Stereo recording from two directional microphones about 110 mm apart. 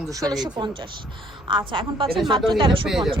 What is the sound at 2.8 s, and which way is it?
Speech, centre (ahead or behind).